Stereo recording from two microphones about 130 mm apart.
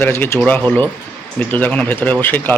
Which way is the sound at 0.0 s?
15° left (ahead or behind).